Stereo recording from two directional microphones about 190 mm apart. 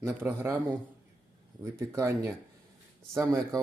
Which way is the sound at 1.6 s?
15° right (ahead or behind).